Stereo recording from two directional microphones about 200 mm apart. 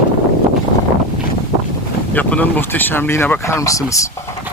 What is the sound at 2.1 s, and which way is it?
Speech, 10° left (ahead or behind).